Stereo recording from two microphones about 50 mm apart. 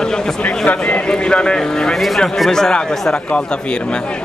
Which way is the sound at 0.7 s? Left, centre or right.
Left.